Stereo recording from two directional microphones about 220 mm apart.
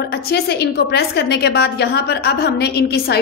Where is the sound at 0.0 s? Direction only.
50° left (ahead or behind).